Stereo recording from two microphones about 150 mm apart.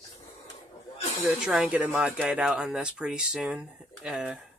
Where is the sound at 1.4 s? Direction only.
5° right (ahead or behind).